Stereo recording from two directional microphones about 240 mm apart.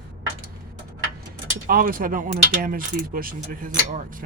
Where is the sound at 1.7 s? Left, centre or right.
Right.